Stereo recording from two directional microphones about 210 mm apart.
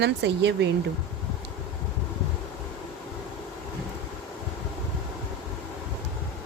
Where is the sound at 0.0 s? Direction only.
55° right (ahead or behind).